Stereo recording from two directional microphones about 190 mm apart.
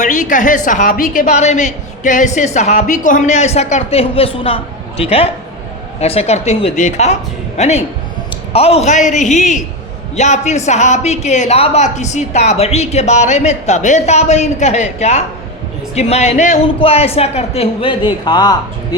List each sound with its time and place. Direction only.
0.0 s a woman's voice: 40° left (ahead or behind); by 18.9 s 20° left (ahead or behind)